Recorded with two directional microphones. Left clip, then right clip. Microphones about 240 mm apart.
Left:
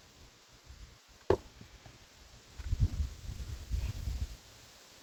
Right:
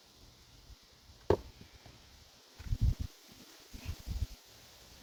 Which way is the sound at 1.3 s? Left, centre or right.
Centre.